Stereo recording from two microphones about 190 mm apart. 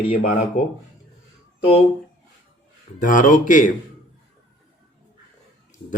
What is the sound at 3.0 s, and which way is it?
Speech, 45° left (ahead or behind).